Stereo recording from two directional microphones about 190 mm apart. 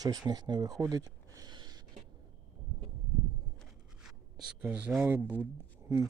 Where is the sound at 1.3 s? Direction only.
20° right (ahead or behind).